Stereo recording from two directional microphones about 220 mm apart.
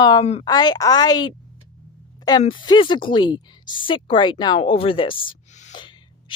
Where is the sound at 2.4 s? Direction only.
20° left (ahead or behind).